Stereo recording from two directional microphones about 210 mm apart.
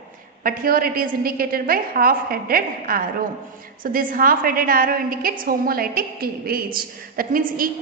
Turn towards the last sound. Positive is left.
turn(degrees=-40)  # may be behind; listen again after turning